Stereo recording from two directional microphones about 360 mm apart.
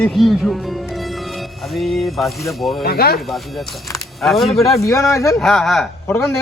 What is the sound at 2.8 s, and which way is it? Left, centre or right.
Speech, left.